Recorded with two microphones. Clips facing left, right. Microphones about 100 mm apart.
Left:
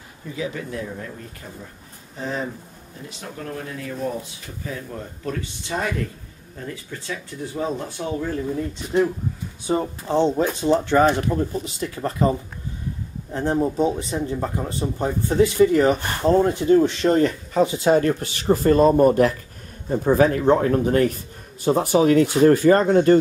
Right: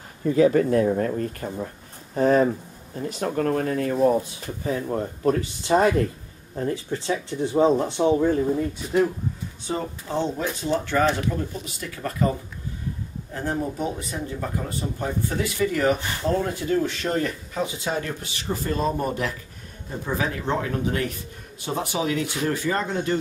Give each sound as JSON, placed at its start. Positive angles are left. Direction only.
{"t": 0.2, "sound": "speech", "side_deg": -50}
{"t": 9.7, "sound": "speech", "side_deg": 20}
{"t": 13.3, "sound": "speech", "side_deg": 25}
{"t": 16.0, "sound": "speech", "side_deg": 50}
{"t": 16.3, "sound": "speech", "side_deg": 25}
{"t": 17.8, "sound": "speech", "side_deg": 50}